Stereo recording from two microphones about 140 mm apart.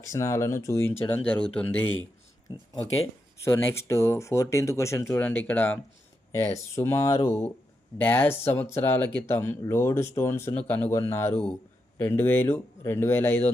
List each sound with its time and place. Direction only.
0.1 s speech: 20° left (ahead or behind)
3.4 s speech: 20° left (ahead or behind)